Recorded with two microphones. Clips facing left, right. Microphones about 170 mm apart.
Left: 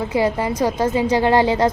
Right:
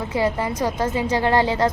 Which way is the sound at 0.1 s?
15° left (ahead or behind).